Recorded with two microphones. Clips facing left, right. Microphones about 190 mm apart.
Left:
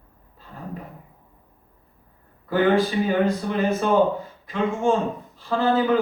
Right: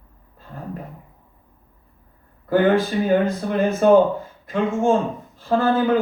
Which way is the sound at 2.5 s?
50° right (ahead or behind).